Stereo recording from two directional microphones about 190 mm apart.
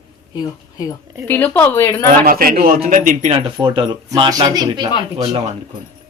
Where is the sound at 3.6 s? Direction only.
25° right (ahead or behind).